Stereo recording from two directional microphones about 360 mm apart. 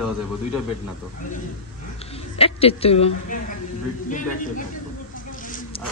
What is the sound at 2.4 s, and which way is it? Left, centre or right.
A man's voice, centre.